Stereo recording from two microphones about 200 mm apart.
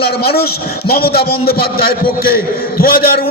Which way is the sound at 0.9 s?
50° left (ahead or behind).